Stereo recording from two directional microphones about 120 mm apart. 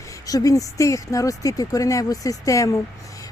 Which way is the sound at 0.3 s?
30° left (ahead or behind).